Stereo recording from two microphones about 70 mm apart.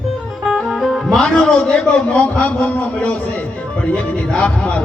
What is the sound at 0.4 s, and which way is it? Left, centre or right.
A man's voice, centre.